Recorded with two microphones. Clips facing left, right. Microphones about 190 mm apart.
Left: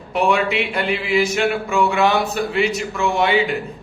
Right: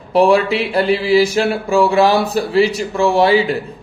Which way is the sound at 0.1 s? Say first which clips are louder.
Right 6 dB; 35° right (ahead or behind).